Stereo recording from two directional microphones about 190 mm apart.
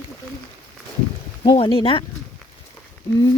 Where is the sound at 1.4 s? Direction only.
25° left (ahead or behind).